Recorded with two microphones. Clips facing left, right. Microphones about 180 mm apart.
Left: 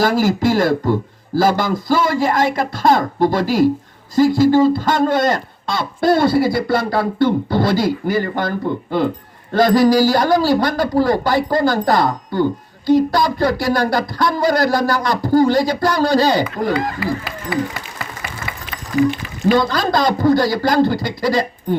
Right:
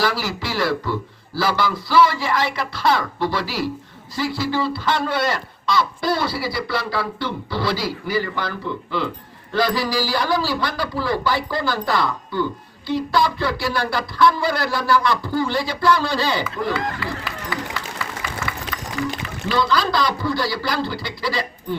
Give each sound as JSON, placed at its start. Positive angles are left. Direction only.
{"t": 0.0, "sound": "a man's voice", "side_deg": 45}
{"t": 19.5, "sound": "a man's voice", "side_deg": 45}